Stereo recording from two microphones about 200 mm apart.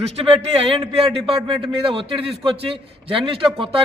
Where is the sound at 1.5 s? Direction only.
25° right (ahead or behind).